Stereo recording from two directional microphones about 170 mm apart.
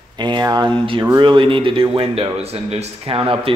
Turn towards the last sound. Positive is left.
turn(degrees=-30)  # may be behind; listen again after turning